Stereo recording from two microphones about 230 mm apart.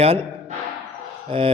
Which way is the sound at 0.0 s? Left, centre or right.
Right.